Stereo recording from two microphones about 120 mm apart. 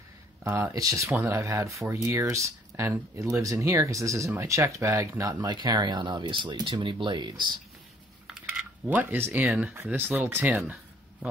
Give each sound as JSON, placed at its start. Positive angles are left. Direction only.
{"t": 0.4, "sound": "speech", "side_deg": -25}
{"t": 8.3, "sound": "a sound", "side_deg": -5}
{"t": 8.8, "sound": "speech", "side_deg": -15}